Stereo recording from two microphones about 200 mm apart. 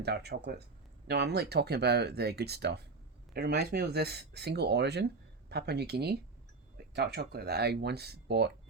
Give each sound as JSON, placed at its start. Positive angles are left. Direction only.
{"t": 0.0, "sound": "speech", "side_deg": -55}